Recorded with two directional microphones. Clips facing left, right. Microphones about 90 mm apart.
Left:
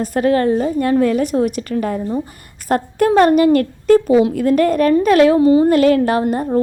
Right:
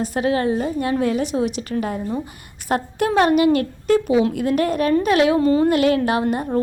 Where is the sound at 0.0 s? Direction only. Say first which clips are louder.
Left 5 dB; 45° left (ahead or behind).